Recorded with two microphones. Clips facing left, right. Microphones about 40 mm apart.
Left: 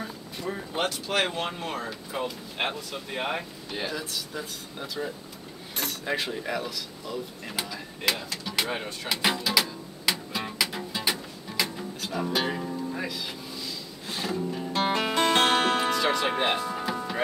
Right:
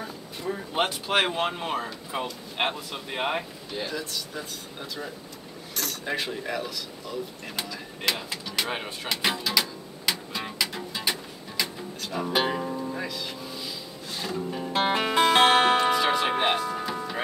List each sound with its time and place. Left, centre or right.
0.0 s a sound: centre
0.7 s speech: right
3.7 s speech: centre
8.6 s speech: centre
9.1 s music: centre
12.3 s speech: centre
12.9 s music: centre
14.4 s speech: centre
15.0 s music: centre